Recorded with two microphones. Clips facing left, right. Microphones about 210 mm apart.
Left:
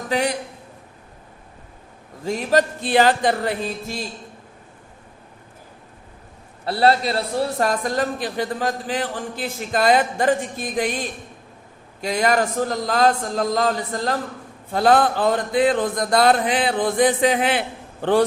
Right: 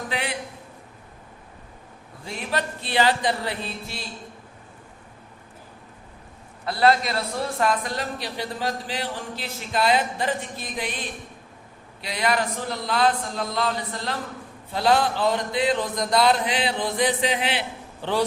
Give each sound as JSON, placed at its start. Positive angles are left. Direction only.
{"t": 0.1, "sound": "a man's voice", "side_deg": 40}
{"t": 2.2, "sound": "a man's voice", "side_deg": 40}
{"t": 6.7, "sound": "a man's voice", "side_deg": 35}
{"t": 11.9, "sound": "a man's voice", "side_deg": 45}